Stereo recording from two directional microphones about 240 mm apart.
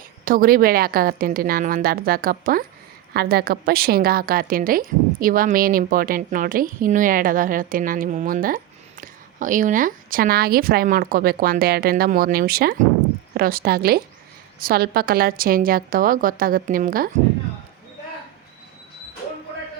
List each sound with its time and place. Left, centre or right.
0.3 s a woman's voice: right